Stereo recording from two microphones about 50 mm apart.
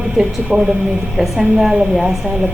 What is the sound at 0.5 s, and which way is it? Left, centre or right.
Speech, right.